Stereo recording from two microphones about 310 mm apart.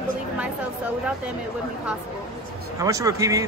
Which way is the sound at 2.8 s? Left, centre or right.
Centre.